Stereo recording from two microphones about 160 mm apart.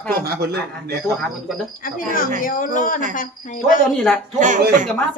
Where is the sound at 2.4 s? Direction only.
60° left (ahead or behind).